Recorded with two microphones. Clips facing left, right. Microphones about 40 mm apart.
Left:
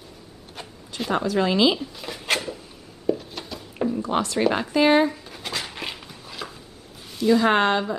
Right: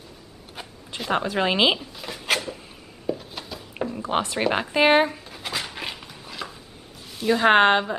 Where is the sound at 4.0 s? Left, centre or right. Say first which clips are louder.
Right 1 dB; right.